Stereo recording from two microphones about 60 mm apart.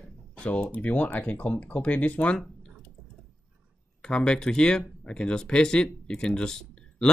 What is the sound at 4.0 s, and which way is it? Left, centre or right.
Speech, centre.